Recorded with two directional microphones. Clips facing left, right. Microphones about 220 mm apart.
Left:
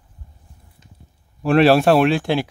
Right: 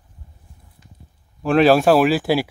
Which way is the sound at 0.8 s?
20° left (ahead or behind).